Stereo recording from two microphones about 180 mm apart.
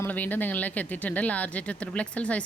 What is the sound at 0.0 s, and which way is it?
A woman's voice, 10° left (ahead or behind).